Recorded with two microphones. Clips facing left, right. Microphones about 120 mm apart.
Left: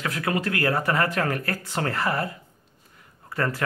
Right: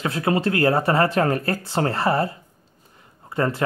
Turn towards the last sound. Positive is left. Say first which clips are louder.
# right 4 dB
turn(degrees=-25)  # may be behind; listen again after turning